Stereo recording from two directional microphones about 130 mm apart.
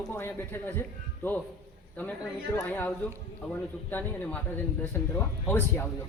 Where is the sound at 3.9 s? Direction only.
10° left (ahead or behind).